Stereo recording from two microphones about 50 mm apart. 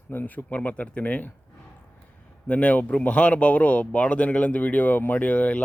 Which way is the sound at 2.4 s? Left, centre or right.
Left.